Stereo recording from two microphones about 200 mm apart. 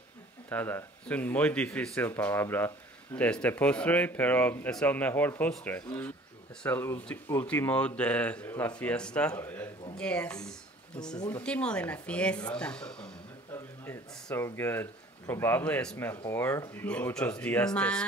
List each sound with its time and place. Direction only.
0.5 s a man's voice: 10° left (ahead or behind)